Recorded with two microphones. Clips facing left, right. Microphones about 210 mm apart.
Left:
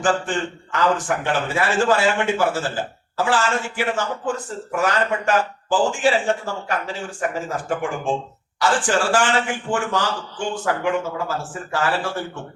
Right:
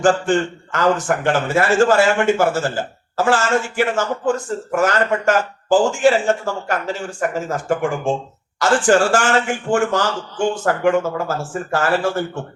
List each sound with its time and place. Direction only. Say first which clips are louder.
0.0 s speech: right 6 dB; 45° right (ahead or behind)